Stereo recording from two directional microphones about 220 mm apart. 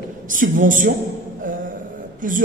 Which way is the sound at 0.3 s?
35° right (ahead or behind).